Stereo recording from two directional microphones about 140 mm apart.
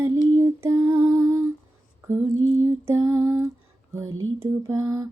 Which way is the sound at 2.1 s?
20° right (ahead or behind).